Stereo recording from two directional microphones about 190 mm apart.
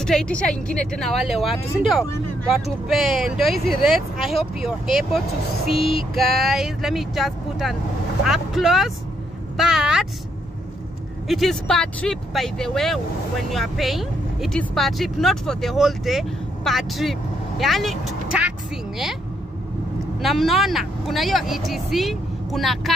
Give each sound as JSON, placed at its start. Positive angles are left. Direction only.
{"t": 0.0, "sound": "speech", "side_deg": 5}
{"t": 9.6, "sound": "vehicle", "side_deg": -5}
{"t": 11.2, "sound": "speech", "side_deg": 0}
{"t": 20.2, "sound": "speech", "side_deg": 0}